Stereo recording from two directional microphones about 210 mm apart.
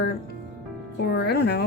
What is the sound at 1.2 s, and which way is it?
Speech, 50° left (ahead or behind).